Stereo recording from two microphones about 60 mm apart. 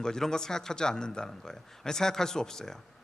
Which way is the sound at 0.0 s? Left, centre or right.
Centre.